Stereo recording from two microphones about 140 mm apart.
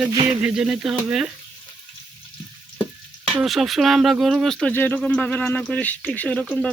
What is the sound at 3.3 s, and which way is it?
Speech, centre (ahead or behind).